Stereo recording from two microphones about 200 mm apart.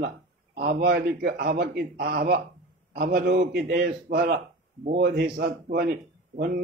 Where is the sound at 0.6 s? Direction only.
50° right (ahead or behind).